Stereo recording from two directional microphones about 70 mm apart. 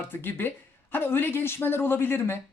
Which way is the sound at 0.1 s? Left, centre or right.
Left.